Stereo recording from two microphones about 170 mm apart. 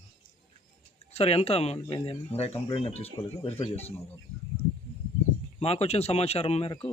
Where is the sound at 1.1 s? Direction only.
35° left (ahead or behind).